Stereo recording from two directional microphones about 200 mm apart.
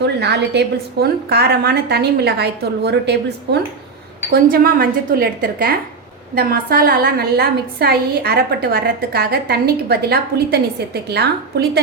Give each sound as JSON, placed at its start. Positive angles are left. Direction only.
{"t": 0.0, "sound": "a woman's voice", "side_deg": -55}